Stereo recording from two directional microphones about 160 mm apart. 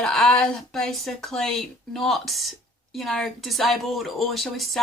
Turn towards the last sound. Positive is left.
turn(degrees=0)  # may be behind; listen again after turning